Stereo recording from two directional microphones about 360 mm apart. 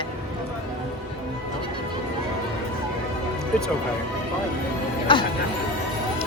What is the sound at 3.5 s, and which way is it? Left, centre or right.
Music, centre.